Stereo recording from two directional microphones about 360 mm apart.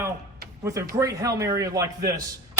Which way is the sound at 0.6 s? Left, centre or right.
Centre.